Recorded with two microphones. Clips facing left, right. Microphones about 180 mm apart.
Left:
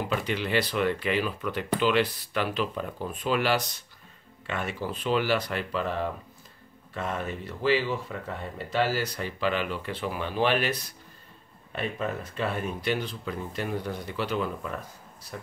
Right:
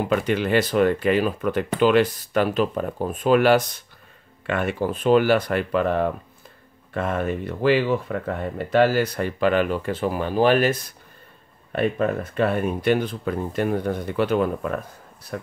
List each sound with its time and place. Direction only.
0.1 s speech: 50° right (ahead or behind)
11.7 s speech: 55° right (ahead or behind)